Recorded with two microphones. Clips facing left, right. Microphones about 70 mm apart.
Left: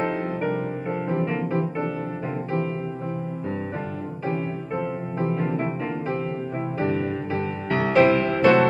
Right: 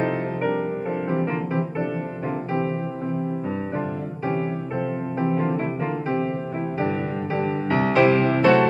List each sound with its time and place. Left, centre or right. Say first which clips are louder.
1.0 s music: even; centre
7.3 s music: right 5 dB; right
7.9 s music: left 1 dB; centre